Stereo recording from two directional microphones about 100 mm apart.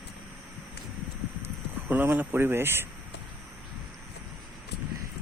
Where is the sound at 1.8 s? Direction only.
20° right (ahead or behind).